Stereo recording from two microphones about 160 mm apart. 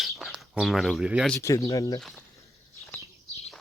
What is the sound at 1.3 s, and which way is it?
Speech, 20° left (ahead or behind).